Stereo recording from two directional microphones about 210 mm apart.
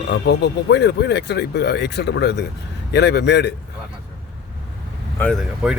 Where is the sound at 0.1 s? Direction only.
55° left (ahead or behind).